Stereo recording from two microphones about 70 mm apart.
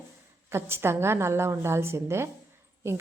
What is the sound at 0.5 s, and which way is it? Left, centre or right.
A woman's voice, right.